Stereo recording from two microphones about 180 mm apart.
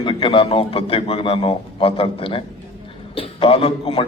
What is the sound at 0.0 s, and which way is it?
A man's voice, 30° left (ahead or behind).